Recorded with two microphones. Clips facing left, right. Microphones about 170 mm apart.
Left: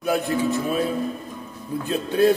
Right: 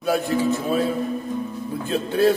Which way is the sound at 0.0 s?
15° left (ahead or behind).